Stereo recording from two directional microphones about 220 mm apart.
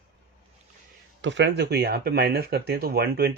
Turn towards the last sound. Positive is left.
turn(degrees=-45)  # may be behind; listen again after turning